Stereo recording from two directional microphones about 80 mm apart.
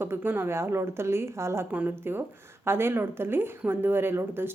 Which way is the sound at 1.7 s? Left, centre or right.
Centre.